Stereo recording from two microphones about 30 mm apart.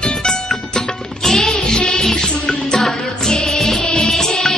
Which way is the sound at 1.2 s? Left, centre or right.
Centre.